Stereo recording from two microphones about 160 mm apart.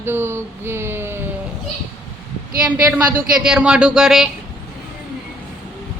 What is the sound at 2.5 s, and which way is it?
Speech, 65° right (ahead or behind).